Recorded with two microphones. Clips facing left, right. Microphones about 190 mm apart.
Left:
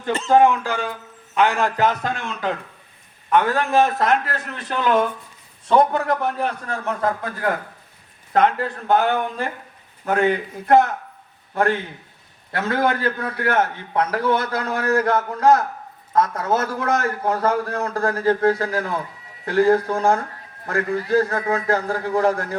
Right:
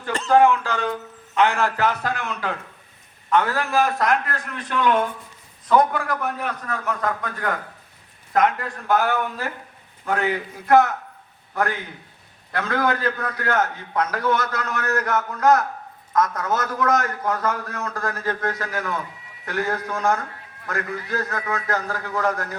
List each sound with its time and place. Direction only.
0.3 s a man's voice: 20° left (ahead or behind); by 5.0 s 35° left (ahead or behind)
5.6 s a man's voice: 25° left (ahead or behind)